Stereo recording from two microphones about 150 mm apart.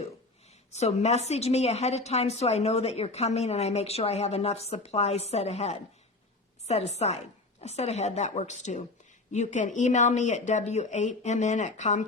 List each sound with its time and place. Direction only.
0.7 s a woman's voice: 45° left (ahead or behind)